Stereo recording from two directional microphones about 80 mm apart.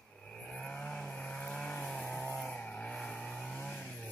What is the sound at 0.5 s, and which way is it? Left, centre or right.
Vehicle, centre.